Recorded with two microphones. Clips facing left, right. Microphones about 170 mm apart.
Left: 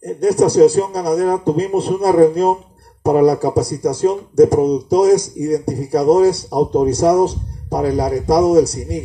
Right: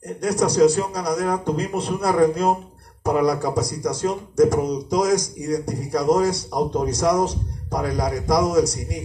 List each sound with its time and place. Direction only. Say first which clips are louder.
0.2 s speech: left 7 dB; 30° left (ahead or behind)